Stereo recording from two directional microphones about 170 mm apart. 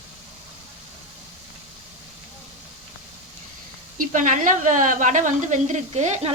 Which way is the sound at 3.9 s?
50° right (ahead or behind).